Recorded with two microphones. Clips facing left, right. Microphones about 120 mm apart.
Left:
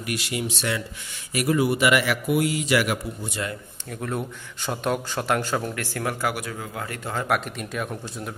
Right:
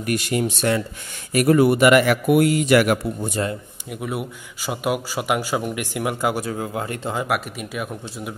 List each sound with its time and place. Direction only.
0.0 s a man's voice: 45° right (ahead or behind)
3.9 s speech: 10° right (ahead or behind)
6.3 s speech: 30° right (ahead or behind)
7.2 s speech: 5° right (ahead or behind)